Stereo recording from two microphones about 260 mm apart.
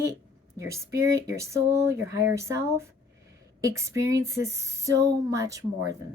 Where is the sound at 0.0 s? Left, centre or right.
Centre.